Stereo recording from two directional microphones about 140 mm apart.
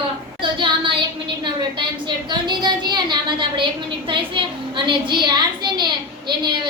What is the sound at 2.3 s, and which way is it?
A woman's voice, 30° right (ahead or behind).